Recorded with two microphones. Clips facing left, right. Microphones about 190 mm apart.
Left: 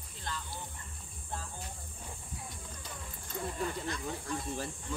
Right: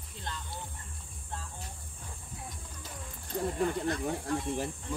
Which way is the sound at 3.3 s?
40° right (ahead or behind).